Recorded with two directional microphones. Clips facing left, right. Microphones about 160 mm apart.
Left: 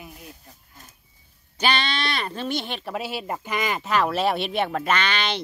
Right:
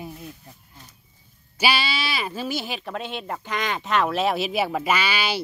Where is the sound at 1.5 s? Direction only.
10° right (ahead or behind).